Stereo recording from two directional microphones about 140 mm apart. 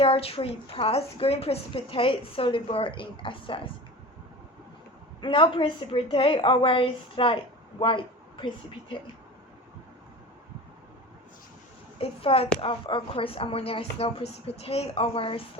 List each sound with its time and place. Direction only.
0.0 s a woman's voice: 45° left (ahead or behind)
5.2 s a woman's voice: 40° left (ahead or behind)
11.9 s speech: 40° left (ahead or behind)